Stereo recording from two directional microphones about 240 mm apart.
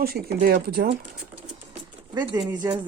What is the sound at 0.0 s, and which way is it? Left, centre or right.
Speech, right.